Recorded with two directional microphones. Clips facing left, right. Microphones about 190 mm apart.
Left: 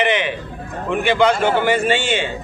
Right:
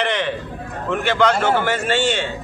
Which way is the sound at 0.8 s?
15° left (ahead or behind).